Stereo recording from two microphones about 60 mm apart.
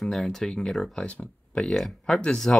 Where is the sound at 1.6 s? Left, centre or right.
Centre.